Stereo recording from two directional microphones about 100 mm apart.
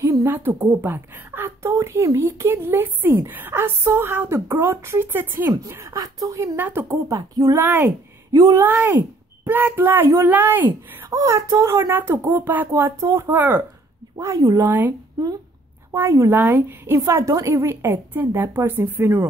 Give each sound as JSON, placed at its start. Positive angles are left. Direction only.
{"t": 0.0, "sound": "a woman's voice", "side_deg": -30}
{"t": 5.5, "sound": "a woman's voice", "side_deg": -35}
{"t": 11.1, "sound": "a woman's voice", "side_deg": -35}
{"t": 13.0, "sound": "speech", "side_deg": -35}
{"t": 13.3, "sound": "a woman's voice", "side_deg": -20}
{"t": 14.1, "sound": "speech", "side_deg": -30}
{"t": 14.7, "sound": "a woman's voice", "side_deg": -20}